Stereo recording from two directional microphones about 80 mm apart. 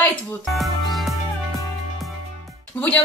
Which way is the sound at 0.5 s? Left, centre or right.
Centre.